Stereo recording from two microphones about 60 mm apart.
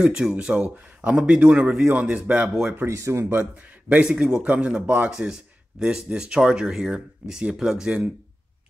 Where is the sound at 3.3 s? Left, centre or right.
Right.